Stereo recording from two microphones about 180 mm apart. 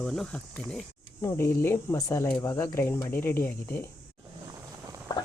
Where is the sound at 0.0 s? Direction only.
5° left (ahead or behind).